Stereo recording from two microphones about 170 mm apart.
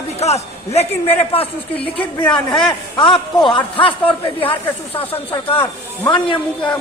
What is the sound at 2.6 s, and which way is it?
A man's voice, 30° left (ahead or behind).